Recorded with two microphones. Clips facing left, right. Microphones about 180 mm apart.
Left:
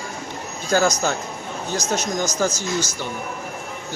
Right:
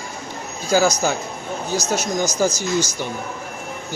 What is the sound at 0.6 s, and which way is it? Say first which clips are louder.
Speech: right 2 dB; 5° right (ahead or behind).